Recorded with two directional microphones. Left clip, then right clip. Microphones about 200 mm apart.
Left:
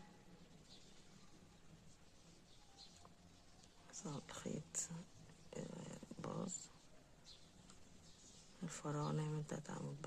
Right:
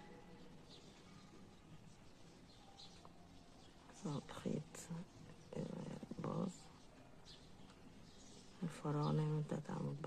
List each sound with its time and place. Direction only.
4.0 s a sound: 5° left (ahead or behind)
5.5 s roaring cats: centre (ahead or behind)
8.6 s speech: centre (ahead or behind)